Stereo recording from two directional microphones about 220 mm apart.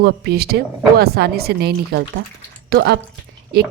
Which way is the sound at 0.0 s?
45° right (ahead or behind).